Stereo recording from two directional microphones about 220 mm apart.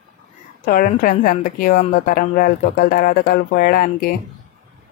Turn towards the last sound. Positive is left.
turn(degrees=40)  # may be behind; listen again after turning